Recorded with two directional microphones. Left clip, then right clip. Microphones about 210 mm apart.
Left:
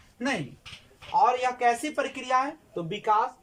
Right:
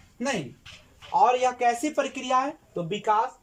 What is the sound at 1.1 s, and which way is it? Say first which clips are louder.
A woman's voice: right 2 dB; 15° right (ahead or behind).